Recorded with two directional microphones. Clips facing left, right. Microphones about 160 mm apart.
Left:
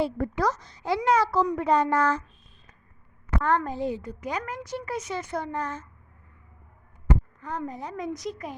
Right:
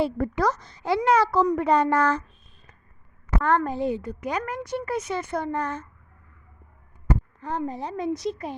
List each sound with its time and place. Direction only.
0.0 s a woman's voice: 65° right (ahead or behind)
3.4 s a woman's voice: 65° right (ahead or behind)
7.4 s a woman's voice: 30° right (ahead or behind)